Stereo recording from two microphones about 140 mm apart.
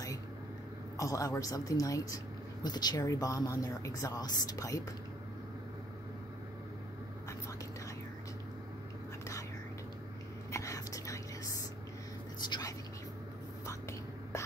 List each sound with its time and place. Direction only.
0.9 s a woman's voice: 25° left (ahead or behind)
10.5 s whispering: 25° left (ahead or behind)
12.4 s whispering: 30° left (ahead or behind)